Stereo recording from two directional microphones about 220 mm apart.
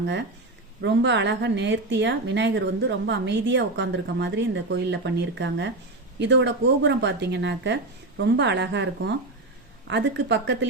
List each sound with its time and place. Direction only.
0.0 s a woman's voice: 55° right (ahead or behind)